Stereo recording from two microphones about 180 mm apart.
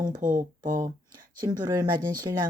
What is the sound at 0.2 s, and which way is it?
Speech, 50° right (ahead or behind).